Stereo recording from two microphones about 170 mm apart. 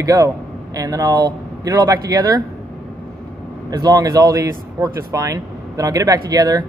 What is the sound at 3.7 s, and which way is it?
Speech, 20° right (ahead or behind).